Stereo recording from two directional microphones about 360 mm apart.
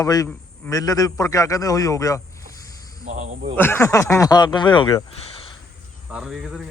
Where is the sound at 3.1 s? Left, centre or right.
Centre.